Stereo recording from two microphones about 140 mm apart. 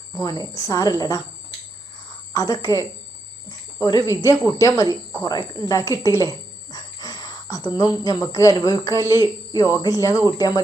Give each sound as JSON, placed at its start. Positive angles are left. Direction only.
{"t": 0.1, "sound": "speech", "side_deg": 25}
{"t": 2.3, "sound": "speech", "side_deg": 25}